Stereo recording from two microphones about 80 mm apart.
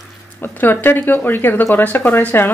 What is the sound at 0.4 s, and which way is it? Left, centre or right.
Speech, left.